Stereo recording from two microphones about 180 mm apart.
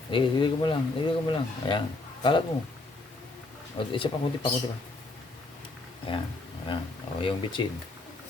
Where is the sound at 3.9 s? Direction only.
30° left (ahead or behind).